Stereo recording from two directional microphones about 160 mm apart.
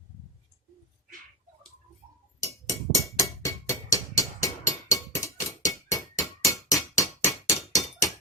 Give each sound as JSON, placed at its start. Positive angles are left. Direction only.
{"t": 2.6, "sound": "music", "side_deg": 20}
{"t": 7.5, "sound": "hammer", "side_deg": 0}